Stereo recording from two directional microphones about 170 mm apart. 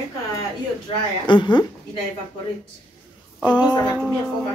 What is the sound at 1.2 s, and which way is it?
Speech, 30° left (ahead or behind).